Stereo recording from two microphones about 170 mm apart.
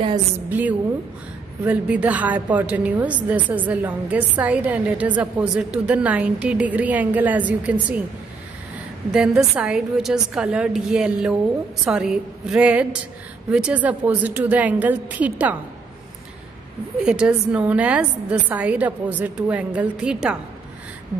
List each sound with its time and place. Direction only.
0.5 s a woman's voice: 10° right (ahead or behind)
9.1 s a woman's voice: 5° right (ahead or behind)
17.0 s a woman's voice: 5° right (ahead or behind)